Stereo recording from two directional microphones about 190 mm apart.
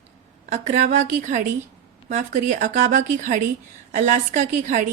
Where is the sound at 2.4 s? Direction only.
40° right (ahead or behind).